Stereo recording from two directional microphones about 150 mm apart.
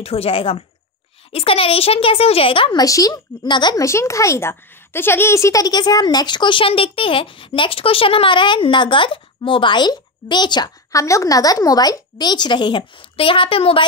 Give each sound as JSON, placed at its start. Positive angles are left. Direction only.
{"t": 0.0, "sound": "speech", "side_deg": 40}
{"t": 2.8, "sound": "speech", "side_deg": 25}